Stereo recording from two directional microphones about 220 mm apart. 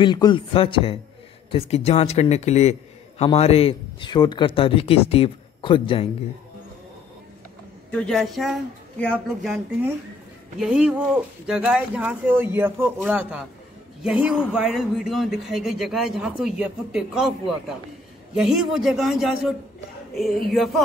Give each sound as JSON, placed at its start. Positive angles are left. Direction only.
{"t": 0.0, "sound": "speech", "side_deg": 20}
{"t": 7.9, "sound": "speech", "side_deg": 5}
{"t": 18.3, "sound": "speech", "side_deg": 0}